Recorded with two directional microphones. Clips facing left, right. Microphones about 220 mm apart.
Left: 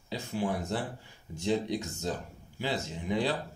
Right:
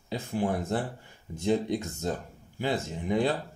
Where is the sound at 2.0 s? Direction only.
50° right (ahead or behind).